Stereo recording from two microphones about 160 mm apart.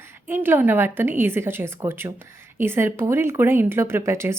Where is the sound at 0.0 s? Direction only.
15° right (ahead or behind).